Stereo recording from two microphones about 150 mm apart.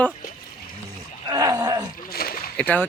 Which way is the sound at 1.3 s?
25° right (ahead or behind).